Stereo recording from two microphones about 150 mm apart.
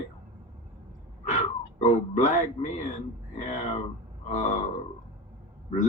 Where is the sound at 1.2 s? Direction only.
55° left (ahead or behind).